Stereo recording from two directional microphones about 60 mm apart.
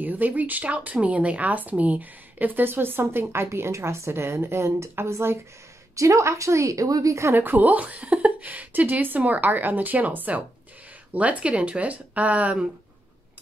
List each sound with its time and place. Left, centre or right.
0.0 s speech: right
3.4 s speech: right
5.9 s a woman's voice: right
7.3 s speech: right